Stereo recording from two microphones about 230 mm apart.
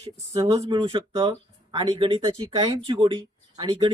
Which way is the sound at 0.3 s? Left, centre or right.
Right.